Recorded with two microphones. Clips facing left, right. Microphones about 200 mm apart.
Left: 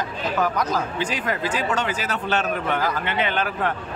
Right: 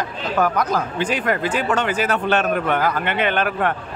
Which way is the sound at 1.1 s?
60° right (ahead or behind).